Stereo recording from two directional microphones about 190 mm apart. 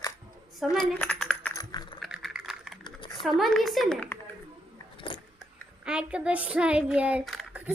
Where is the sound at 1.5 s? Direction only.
20° left (ahead or behind).